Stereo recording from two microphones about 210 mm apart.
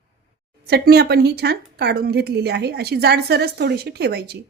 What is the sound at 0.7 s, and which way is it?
A woman's voice, 50° right (ahead or behind).